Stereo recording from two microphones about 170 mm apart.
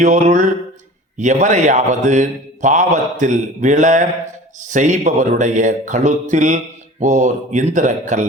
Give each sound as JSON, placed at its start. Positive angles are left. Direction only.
{"t": 0.0, "sound": "a man's voice", "side_deg": -45}